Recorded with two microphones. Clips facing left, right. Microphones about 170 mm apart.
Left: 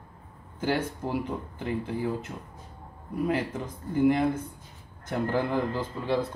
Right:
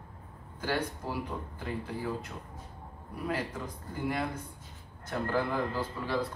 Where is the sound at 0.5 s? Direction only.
25° left (ahead or behind).